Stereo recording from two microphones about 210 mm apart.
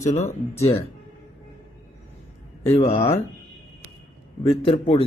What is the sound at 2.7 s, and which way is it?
Speech, 25° left (ahead or behind).